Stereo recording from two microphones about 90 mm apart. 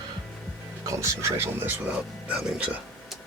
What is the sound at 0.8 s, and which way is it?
Speech, 35° right (ahead or behind).